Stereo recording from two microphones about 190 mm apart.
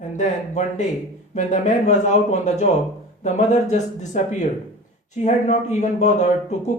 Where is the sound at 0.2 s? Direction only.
40° left (ahead or behind).